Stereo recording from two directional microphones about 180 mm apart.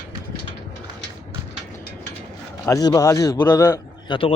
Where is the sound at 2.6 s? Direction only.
20° left (ahead or behind).